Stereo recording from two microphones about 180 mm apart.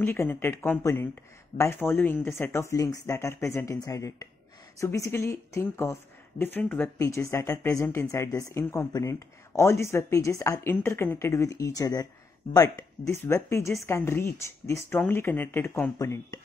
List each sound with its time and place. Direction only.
0.0 s speech: 10° left (ahead or behind)